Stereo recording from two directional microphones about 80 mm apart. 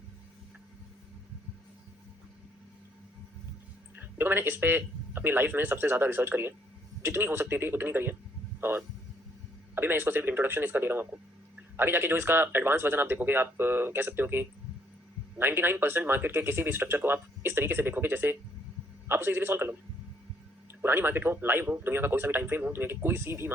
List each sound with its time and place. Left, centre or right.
3.9 s speech: right
20.8 s speech: right